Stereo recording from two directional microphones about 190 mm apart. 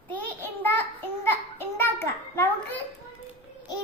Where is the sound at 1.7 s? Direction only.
15° left (ahead or behind).